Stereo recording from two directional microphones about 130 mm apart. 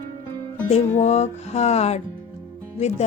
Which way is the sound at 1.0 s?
60° left (ahead or behind).